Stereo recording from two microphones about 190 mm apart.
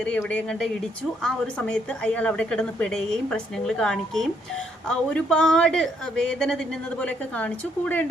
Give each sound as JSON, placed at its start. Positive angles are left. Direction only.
{"t": 0.0, "sound": "a woman's voice", "side_deg": 5}